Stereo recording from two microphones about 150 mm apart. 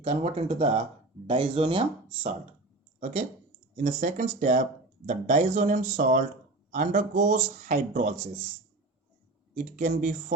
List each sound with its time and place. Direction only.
0.0 s speech: 45° right (ahead or behind)
3.0 s speech: 50° right (ahead or behind)
9.6 s speech: 60° right (ahead or behind)